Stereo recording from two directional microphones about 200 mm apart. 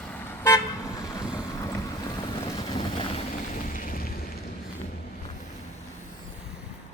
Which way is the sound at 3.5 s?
45° left (ahead or behind).